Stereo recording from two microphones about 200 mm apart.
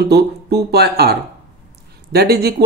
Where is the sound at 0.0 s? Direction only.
55° right (ahead or behind).